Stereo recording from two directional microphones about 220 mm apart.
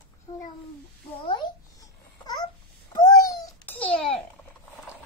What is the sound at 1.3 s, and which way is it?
Babbling, 20° left (ahead or behind).